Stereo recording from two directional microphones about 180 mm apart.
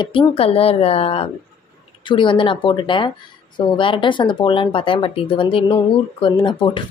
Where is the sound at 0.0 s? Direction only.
30° left (ahead or behind).